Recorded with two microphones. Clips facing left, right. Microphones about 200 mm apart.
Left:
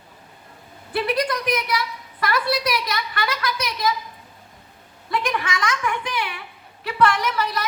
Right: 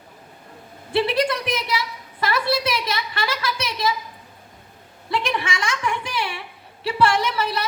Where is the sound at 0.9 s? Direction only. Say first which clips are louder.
Right 2 dB; 25° right (ahead or behind).